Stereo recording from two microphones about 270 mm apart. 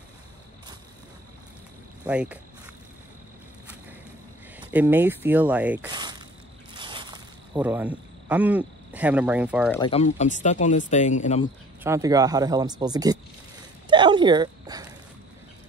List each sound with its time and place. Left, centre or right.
2.0 s speech: centre
4.6 s speech: centre
5.9 s mechanisms: centre
6.8 s a sound: centre
7.5 s speech: centre
9.7 s speech: centre
11.8 s speech: centre
13.8 s a sound: centre